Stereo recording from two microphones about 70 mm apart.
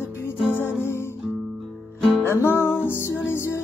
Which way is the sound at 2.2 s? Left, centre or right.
Left.